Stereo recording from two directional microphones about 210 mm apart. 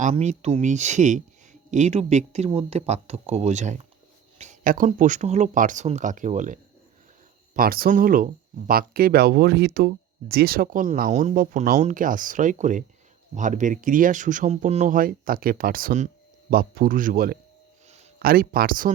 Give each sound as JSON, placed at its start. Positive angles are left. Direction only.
{"t": 0.0, "sound": "speech", "side_deg": -35}